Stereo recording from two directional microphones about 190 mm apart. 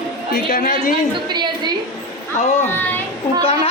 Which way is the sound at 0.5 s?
45° left (ahead or behind).